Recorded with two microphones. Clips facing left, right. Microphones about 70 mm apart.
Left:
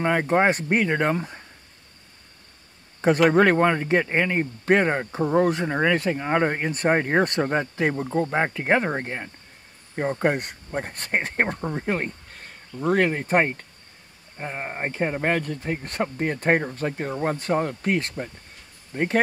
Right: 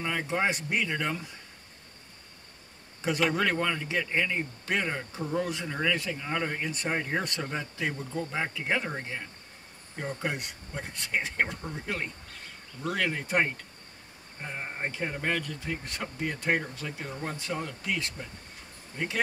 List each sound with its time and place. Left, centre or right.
0.0 s a man's voice: left
3.0 s a man's voice: left